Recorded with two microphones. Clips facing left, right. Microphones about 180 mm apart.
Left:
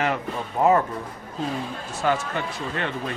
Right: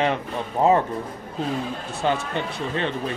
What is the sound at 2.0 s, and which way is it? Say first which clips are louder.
Speech: even; 20° right (ahead or behind).